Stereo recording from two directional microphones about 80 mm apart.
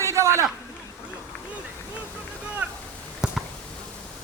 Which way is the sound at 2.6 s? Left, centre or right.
Centre.